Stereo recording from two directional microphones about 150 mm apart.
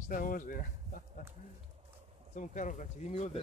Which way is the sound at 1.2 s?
65° left (ahead or behind).